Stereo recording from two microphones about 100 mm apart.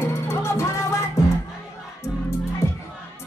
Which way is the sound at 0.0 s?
25° left (ahead or behind).